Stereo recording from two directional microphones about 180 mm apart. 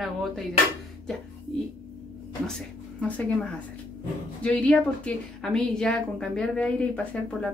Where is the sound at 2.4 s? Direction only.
5° left (ahead or behind).